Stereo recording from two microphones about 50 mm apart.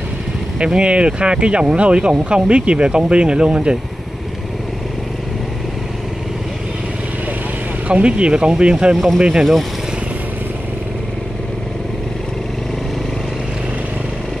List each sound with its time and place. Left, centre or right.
0.6 s speech: centre
7.9 s speech: right
8.9 s speech: centre